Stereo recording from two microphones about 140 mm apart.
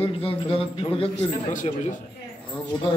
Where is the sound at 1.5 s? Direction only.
65° left (ahead or behind).